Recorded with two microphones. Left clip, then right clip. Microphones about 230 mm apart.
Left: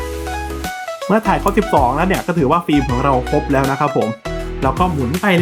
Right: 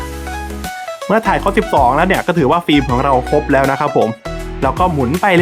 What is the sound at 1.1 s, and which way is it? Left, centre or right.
Speech, centre.